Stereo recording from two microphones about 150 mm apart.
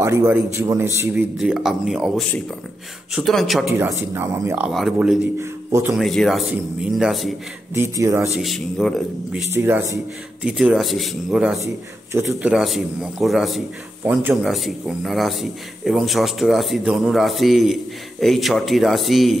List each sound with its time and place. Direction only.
0.0 s a man's voice: 20° right (ahead or behind)
1.4 s speech: 5° right (ahead or behind)
3.8 s speech: 15° right (ahead or behind)
4.6 s speech: 5° right (ahead or behind)
5.4 s a man's voice: 20° right (ahead or behind)
5.9 s speech: centre (ahead or behind)
7.7 s speech: 20° right (ahead or behind)
8.3 s speech: centre (ahead or behind)
9.5 s speech: 15° right (ahead or behind)
10.4 s speech: centre (ahead or behind)
11.6 s a man's voice: 20° right (ahead or behind)
12.3 s speech: 5° right (ahead or behind)
14.0 s speech: 15° right (ahead or behind)
14.4 s speech: centre (ahead or behind)